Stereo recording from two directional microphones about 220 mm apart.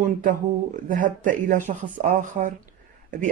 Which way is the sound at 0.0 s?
35° right (ahead or behind).